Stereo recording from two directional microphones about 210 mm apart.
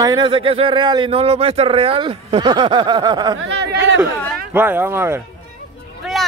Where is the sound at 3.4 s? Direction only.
55° right (ahead or behind).